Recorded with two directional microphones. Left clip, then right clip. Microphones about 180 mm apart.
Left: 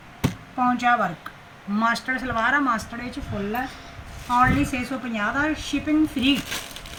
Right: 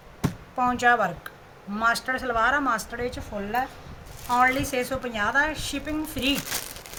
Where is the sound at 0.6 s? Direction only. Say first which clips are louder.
Left 1 dB; 80° right.